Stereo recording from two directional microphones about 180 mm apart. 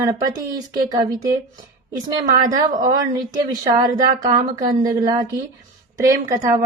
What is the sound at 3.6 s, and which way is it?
A woman's voice, 20° right (ahead or behind).